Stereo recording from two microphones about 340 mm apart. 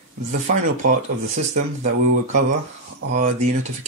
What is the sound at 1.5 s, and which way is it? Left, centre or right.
Speech, right.